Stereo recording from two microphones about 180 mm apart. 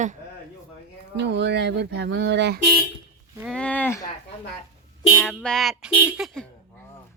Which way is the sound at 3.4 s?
5° left (ahead or behind).